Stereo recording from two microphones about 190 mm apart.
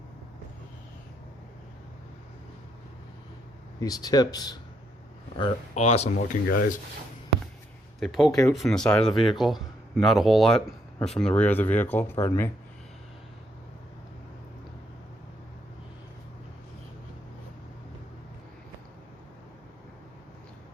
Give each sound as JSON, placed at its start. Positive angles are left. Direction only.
{"t": 3.8, "sound": "speech", "side_deg": 20}
{"t": 5.7, "sound": "speech", "side_deg": 35}
{"t": 6.2, "sound": "speech", "side_deg": 45}
{"t": 7.9, "sound": "speech", "side_deg": 0}